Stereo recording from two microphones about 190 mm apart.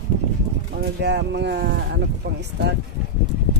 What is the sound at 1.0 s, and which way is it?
Speech, 60° right (ahead or behind).